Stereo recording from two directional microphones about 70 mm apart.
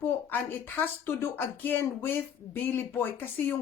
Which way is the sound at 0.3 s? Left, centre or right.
Left.